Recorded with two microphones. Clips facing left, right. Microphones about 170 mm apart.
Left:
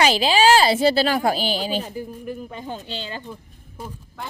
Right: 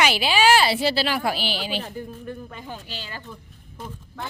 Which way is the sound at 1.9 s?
10° left (ahead or behind).